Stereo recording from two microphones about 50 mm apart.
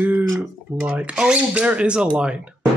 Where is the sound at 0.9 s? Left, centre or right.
Right.